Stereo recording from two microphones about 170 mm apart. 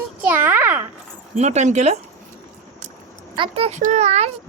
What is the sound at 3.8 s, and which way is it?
Speech, 45° right (ahead or behind).